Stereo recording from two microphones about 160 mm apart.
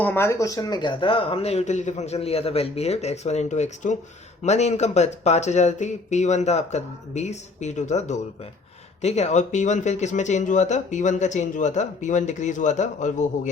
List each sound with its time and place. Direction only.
0.0 s speech: 15° left (ahead or behind); by 13.5 s 50° left (ahead or behind)